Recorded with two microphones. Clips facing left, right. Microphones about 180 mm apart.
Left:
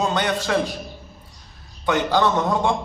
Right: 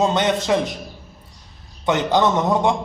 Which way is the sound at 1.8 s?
20° right (ahead or behind).